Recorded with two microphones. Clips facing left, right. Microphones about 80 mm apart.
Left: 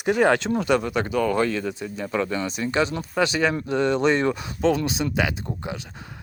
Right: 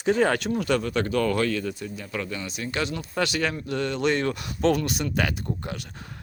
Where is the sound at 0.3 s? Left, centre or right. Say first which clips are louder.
Left 4 dB; left.